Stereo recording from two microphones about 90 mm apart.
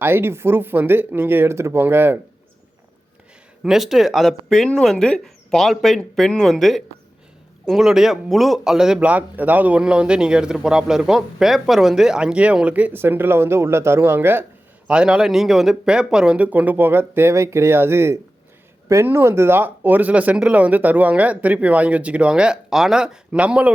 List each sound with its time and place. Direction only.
0.0 s speech: 25° right (ahead or behind)
3.6 s speech: 5° right (ahead or behind)
9.0 s a man's voice: 20° right (ahead or behind)
14.8 s a man's voice: 10° right (ahead or behind)